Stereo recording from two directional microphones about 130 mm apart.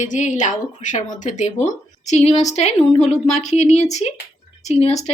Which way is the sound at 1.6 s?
60° left (ahead or behind).